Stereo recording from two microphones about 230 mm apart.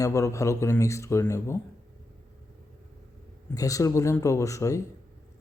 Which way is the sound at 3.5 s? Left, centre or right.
Centre.